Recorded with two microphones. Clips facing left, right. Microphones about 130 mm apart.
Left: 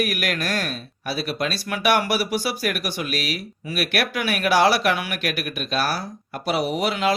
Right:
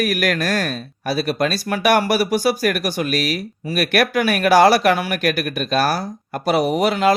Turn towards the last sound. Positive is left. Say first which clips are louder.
# right 6 dB
turn(degrees=-45)  # may be behind; listen again after turning